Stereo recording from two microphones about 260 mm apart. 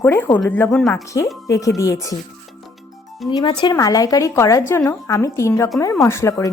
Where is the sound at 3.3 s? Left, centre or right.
Centre.